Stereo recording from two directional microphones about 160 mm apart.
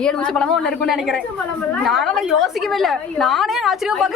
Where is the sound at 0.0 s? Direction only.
5° left (ahead or behind).